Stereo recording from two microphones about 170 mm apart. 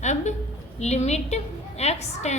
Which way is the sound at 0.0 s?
45° left (ahead or behind).